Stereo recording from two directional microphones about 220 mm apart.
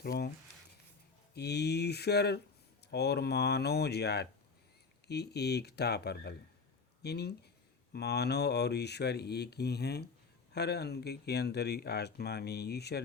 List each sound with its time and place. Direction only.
0.0 s speech: 45° left (ahead or behind)
1.3 s speech: 50° left (ahead or behind)